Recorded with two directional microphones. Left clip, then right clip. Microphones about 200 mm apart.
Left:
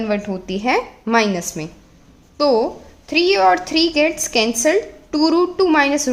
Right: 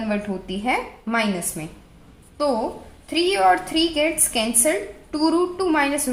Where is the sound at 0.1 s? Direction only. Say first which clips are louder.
Left 5 dB; 45° left (ahead or behind).